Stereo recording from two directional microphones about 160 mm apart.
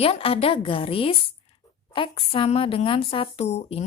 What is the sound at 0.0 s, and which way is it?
Speech, 35° left (ahead or behind).